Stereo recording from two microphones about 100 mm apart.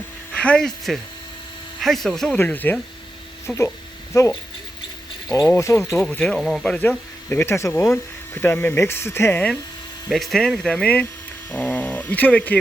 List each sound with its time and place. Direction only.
0.3 s speech: 10° left (ahead or behind)
2.4 s speech: 20° left (ahead or behind)
3.4 s speech: 30° left (ahead or behind)
5.5 s speech: 25° left (ahead or behind)
5.9 s speech: 5° left (ahead or behind); by 9.4 s 25° left (ahead or behind)
10.1 s speech: centre (ahead or behind)